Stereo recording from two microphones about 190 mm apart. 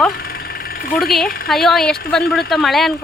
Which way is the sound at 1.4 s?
Centre (ahead or behind).